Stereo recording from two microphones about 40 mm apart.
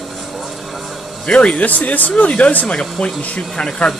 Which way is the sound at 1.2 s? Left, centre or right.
Left.